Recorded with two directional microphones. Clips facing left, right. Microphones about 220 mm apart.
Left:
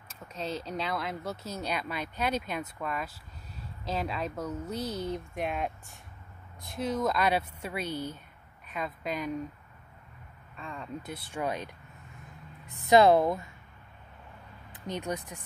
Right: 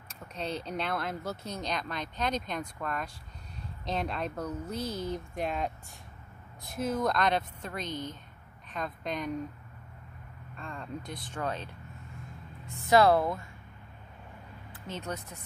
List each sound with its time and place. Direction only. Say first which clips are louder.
0.1 s a woman's voice: even; centre (ahead or behind)
10.6 s speech: even; centre (ahead or behind)
12.8 s speech: left 2 dB; 20° left (ahead or behind)
14.7 s speech: left 4 dB; 15° left (ahead or behind)